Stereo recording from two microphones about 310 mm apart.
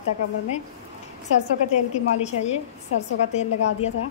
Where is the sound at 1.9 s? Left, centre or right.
Left.